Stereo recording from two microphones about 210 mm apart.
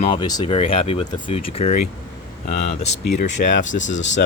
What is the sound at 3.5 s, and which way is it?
Speech, 60° left (ahead or behind).